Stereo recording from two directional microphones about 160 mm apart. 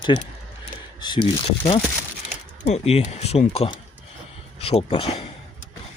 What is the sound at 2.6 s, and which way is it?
Speech, 40° left (ahead or behind).